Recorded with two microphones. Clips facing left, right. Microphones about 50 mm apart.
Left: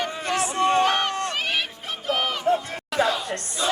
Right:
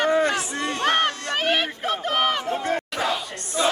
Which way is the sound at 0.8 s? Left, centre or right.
Right.